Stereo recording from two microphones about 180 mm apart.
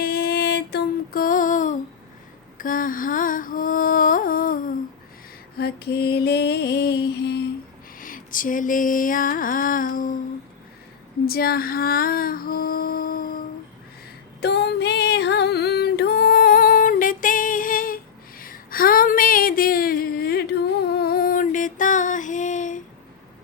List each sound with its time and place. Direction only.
0.0 s music: 60° left (ahead or behind)
5.5 s mantra: 60° left (ahead or behind)
7.9 s music: 50° left (ahead or behind)
11.3 s child singing: 55° left (ahead or behind)
14.4 s music: 65° left (ahead or behind); by 22.8 s 45° left (ahead or behind)